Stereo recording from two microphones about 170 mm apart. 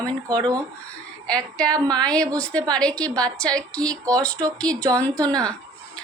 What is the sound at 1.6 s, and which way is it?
Speech, 25° right (ahead or behind).